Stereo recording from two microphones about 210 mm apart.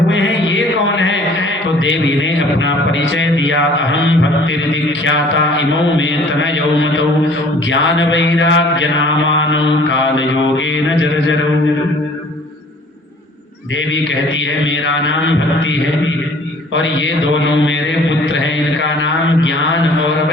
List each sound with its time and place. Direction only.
0.1 s a sound: 60° left (ahead or behind)
4.7 s mantra: 60° left (ahead or behind)
14.6 s mantra: 60° left (ahead or behind)